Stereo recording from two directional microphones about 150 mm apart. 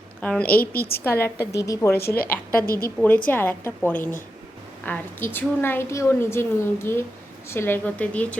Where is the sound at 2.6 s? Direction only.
80° left.